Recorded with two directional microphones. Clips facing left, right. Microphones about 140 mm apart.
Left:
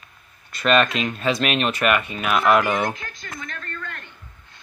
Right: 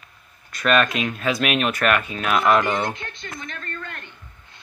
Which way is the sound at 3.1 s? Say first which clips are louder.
Right 1 dB; 25° right (ahead or behind).